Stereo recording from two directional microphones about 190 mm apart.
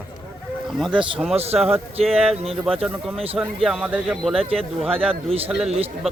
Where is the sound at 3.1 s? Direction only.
30° right (ahead or behind).